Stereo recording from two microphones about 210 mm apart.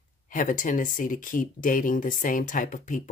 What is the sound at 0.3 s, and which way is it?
Speech, 40° left (ahead or behind).